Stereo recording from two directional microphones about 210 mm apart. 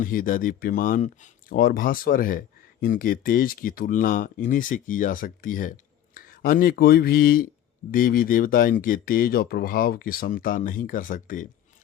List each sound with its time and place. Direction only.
0.0 s speech: 40° left (ahead or behind)